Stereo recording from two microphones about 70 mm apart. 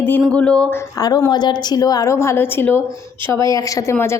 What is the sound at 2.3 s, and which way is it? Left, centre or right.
Speech, left.